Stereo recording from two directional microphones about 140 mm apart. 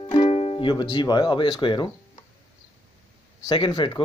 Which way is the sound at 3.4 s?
35° left (ahead or behind).